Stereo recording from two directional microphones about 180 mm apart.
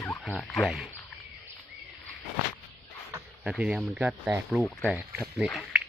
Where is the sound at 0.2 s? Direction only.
Centre (ahead or behind).